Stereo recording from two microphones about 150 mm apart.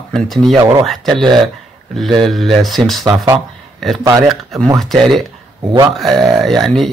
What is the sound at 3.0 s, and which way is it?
Speech, 25° right (ahead or behind).